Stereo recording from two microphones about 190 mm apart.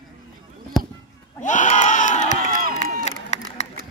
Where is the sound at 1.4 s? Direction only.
40° left (ahead or behind).